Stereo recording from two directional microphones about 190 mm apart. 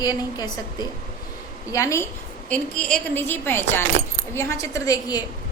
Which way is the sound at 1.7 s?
15° left (ahead or behind).